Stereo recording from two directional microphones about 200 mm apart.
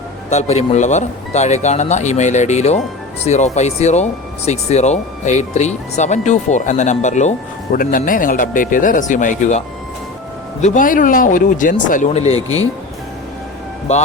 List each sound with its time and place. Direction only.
0.3 s speech: 35° left (ahead or behind)
13.9 s speech: 35° left (ahead or behind)